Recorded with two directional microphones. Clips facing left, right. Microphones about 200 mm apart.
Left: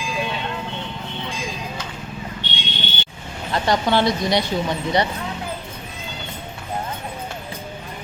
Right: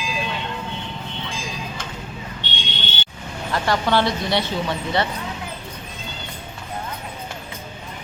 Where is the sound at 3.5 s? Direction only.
20° left (ahead or behind).